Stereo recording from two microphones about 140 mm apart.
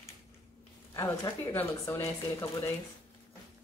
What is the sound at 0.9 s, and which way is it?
A woman's voice, 25° left (ahead or behind).